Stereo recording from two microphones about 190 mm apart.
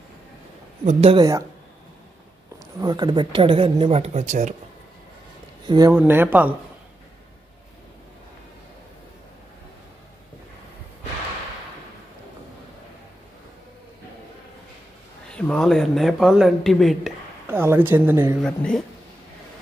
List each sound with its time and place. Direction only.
0.8 s speech: 30° right (ahead or behind)
2.8 s speech: 20° right (ahead or behind); by 4.6 s 40° right (ahead or behind)
5.7 s speech: 20° right (ahead or behind)
15.3 s speech: 5° left (ahead or behind)
17.5 s speech: 10° right (ahead or behind)
18.4 s speech: 5° left (ahead or behind)